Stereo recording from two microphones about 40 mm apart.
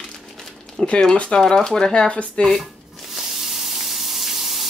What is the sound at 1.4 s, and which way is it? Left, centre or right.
Speech, centre.